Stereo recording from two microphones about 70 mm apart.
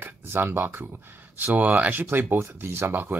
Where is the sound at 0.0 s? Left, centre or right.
Right.